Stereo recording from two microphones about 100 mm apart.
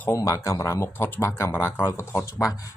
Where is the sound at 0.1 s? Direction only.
35° left (ahead or behind).